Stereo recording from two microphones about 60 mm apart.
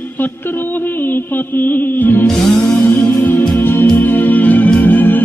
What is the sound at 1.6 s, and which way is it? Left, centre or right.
Music, left.